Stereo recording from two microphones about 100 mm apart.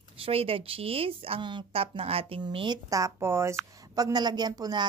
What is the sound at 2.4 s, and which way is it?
Speech, 50° right (ahead or behind).